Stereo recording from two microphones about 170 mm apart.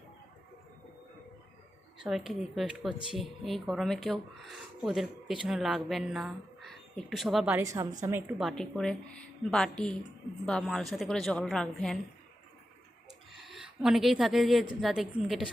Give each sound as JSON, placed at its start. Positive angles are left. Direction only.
{"t": 2.0, "sound": "speech", "side_deg": 0}
{"t": 7.6, "sound": "a woman's voice", "side_deg": -20}
{"t": 8.4, "sound": "speech", "side_deg": 0}
{"t": 13.3, "sound": "speech", "side_deg": 0}